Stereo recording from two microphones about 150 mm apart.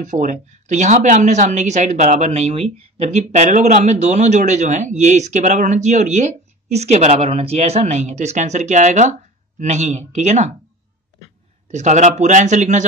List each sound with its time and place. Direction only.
0.0 s speech: 55° right (ahead or behind)
11.6 s speech: 50° right (ahead or behind)